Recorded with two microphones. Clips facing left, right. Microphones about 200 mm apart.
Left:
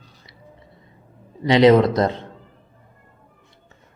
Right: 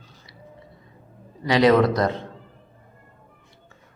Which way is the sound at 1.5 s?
25° left (ahead or behind).